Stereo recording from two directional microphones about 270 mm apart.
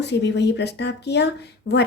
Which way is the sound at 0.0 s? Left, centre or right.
Left.